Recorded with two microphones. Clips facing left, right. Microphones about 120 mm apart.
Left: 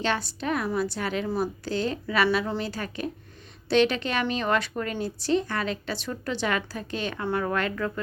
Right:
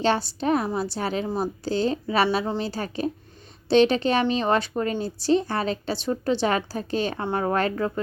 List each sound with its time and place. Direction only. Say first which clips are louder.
0.0 s a woman's voice: right 5 dB; 30° right (ahead or behind)